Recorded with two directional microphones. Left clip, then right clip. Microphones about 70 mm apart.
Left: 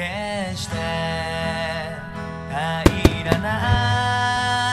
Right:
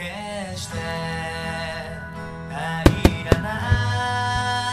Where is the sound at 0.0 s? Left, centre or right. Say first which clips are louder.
Left 5 dB; left.